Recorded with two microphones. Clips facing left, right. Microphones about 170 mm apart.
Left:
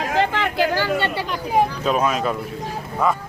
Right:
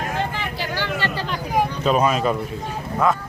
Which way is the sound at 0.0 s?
90° left.